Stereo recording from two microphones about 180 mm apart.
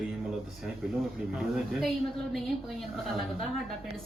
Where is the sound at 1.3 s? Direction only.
Centre (ahead or behind).